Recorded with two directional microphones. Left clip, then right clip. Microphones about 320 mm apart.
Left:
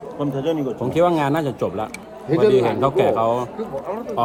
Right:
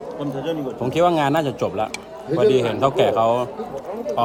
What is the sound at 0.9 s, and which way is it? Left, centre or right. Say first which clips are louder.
A man's voice: right 1 dB; centre.